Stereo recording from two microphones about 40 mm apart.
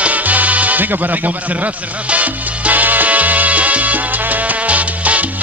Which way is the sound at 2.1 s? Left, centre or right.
Right.